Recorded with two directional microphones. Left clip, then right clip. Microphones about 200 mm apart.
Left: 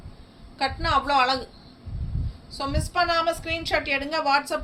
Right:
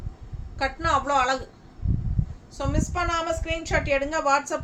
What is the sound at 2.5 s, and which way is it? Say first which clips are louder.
A woman's voice: left 3 dB; 15° right (ahead or behind).